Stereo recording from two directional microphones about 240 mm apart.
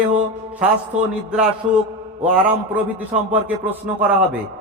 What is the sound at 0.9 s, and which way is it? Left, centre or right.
Speech, right.